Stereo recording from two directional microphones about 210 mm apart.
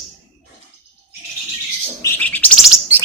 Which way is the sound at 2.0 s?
10° left (ahead or behind).